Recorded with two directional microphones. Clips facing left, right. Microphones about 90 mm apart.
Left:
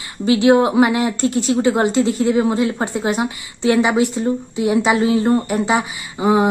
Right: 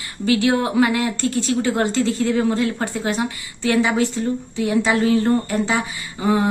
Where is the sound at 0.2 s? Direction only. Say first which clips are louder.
Left 5 dB; 20° left (ahead or behind).